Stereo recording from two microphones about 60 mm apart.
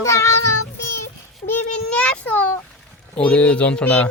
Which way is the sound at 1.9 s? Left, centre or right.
Left.